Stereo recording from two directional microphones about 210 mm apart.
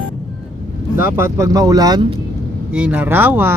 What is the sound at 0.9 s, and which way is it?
Speech, 10° right (ahead or behind).